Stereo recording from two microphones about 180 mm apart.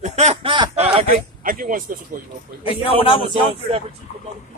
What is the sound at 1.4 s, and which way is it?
Speech, 50° right (ahead or behind).